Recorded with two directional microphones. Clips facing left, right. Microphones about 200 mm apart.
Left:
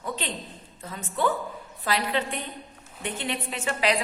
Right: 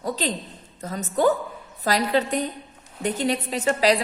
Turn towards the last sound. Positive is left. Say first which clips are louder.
# right 6 dB
turn(degrees=-40)  # may be behind; listen again after turning